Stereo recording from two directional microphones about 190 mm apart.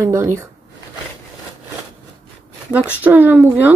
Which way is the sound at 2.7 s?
10° right (ahead or behind).